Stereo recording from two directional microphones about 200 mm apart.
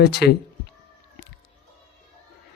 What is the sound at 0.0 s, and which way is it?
Speech, 55° left (ahead or behind).